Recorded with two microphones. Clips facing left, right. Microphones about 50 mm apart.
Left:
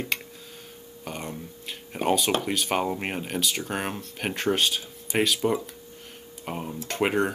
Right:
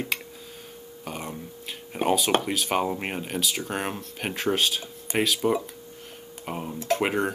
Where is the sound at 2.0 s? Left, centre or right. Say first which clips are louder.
Right 1 dB; centre.